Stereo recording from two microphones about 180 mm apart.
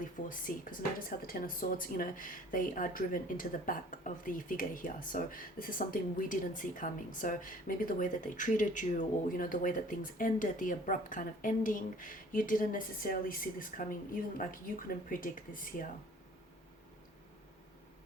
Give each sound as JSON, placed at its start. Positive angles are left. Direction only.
{"t": 0.0, "sound": "speech", "side_deg": 50}